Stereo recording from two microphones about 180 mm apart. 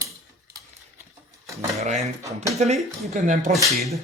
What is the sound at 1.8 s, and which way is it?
Speech, 40° right (ahead or behind).